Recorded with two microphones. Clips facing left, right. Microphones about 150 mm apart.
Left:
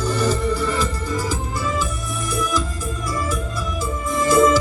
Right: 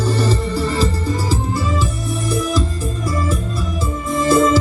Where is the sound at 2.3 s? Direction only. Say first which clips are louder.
Right 3 dB; 30° right (ahead or behind).